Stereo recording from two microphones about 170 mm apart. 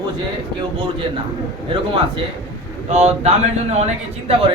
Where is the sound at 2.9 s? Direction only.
40° right (ahead or behind).